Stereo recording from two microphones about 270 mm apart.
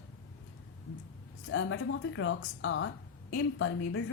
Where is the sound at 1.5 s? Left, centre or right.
Left.